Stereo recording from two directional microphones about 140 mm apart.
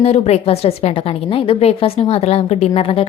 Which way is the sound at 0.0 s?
50° left (ahead or behind).